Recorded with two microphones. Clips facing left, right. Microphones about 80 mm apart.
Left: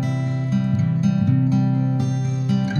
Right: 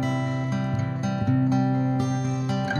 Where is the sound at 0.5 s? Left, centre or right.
Right.